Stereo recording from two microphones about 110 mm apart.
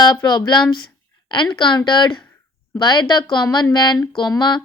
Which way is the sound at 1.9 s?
45° left (ahead or behind).